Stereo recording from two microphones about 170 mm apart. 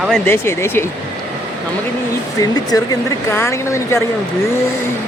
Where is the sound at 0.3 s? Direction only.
15° left (ahead or behind).